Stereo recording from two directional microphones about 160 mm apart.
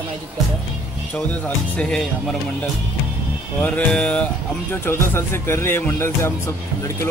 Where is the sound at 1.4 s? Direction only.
5° left (ahead or behind).